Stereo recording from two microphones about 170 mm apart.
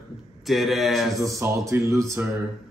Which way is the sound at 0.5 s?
Centre (ahead or behind).